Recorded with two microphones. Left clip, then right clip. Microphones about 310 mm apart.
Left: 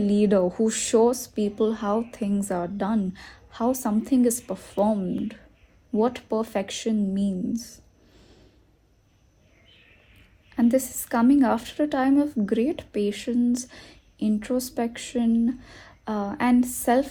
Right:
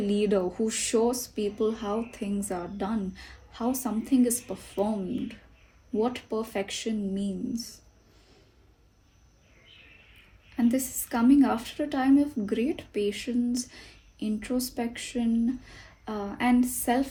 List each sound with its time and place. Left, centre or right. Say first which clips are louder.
0.1 s speech: left 5 dB; left
6.0 s speech: left 5 dB; left
10.6 s speech: left 5 dB; left